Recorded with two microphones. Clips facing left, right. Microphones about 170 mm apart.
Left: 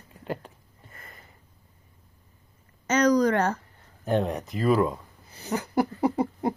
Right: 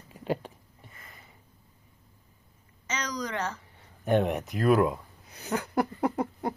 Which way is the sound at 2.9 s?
50° left (ahead or behind).